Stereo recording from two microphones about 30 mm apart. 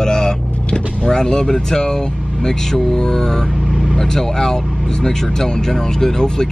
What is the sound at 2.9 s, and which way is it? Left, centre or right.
Speech, left.